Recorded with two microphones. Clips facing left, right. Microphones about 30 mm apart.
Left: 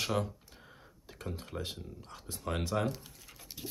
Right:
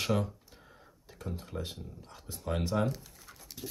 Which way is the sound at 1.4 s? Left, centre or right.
Centre.